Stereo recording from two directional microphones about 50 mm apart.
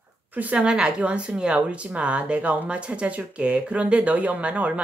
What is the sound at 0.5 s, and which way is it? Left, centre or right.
Speech, centre.